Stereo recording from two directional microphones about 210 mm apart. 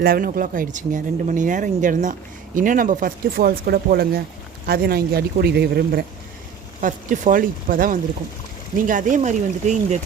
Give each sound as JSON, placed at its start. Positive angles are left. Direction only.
{"t": 0.0, "sound": "speech", "side_deg": -45}